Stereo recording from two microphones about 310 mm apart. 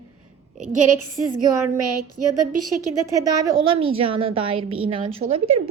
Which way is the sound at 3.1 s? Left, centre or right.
Centre.